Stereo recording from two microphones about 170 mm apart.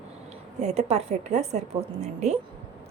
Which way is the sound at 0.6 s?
40° right (ahead or behind).